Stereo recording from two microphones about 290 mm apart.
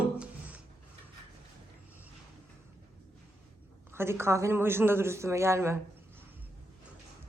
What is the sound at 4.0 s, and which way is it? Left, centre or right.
Speech, centre.